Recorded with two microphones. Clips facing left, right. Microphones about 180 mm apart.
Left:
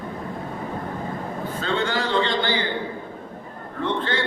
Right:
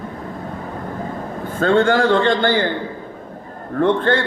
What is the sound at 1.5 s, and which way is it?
A man's voice, 50° right (ahead or behind).